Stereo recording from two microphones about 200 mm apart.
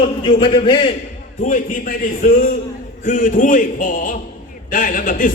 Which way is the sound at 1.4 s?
40° left (ahead or behind).